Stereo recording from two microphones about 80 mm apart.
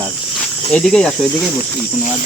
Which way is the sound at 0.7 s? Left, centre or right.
Centre.